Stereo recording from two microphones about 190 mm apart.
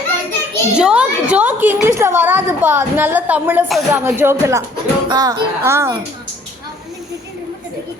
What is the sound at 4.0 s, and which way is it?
A woman's voice, 15° right (ahead or behind).